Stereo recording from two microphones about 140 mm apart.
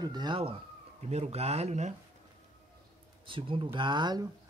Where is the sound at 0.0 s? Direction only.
30° right (ahead or behind).